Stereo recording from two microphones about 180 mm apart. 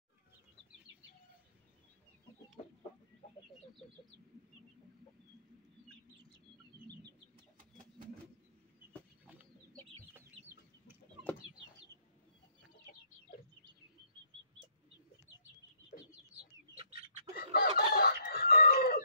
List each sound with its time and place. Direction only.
9.2 s chicken: 10° right (ahead or behind)
17.5 s chicken: 60° left (ahead or behind)